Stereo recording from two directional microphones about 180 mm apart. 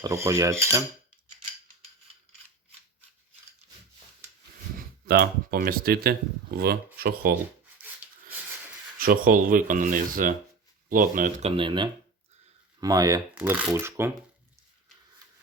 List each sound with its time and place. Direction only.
0.0 s cutlery: 15° right (ahead or behind)
5.0 s speech: 60° right (ahead or behind)
9.0 s speech: 55° right (ahead or behind); by 13.2 s 20° right (ahead or behind)
13.3 s cutlery: 10° right (ahead or behind)